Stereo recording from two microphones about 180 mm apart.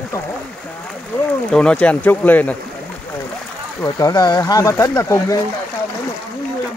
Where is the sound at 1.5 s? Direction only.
5° left (ahead or behind).